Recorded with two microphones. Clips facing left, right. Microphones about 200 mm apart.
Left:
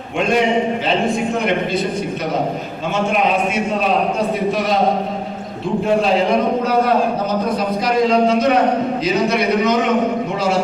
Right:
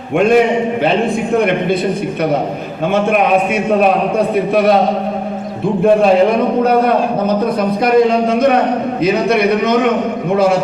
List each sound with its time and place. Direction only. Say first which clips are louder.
4.5 s speech: right 8 dB; 60° right (ahead or behind)
7.9 s speech: right 3 dB; 55° right (ahead or behind)